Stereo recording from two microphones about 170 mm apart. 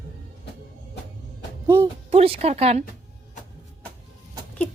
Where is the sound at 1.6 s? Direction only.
15° right (ahead or behind).